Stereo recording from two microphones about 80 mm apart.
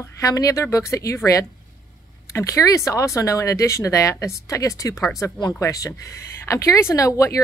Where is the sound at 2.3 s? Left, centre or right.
Left.